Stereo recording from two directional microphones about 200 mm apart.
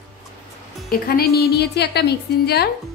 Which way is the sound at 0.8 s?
50° left (ahead or behind).